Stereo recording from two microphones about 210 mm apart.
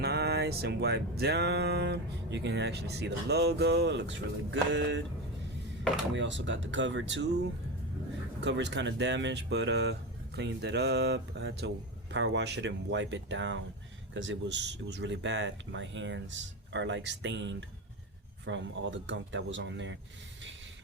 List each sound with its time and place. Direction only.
0.0 s music: 50° right (ahead or behind)
6.1 s speech: 60° right (ahead or behind)
10.3 s music: 55° right (ahead or behind)
12.1 s speech: 55° right (ahead or behind)